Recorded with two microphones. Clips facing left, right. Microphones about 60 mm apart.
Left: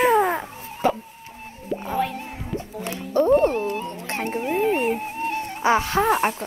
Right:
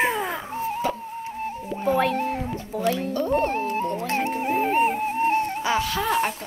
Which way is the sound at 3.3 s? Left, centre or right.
Right.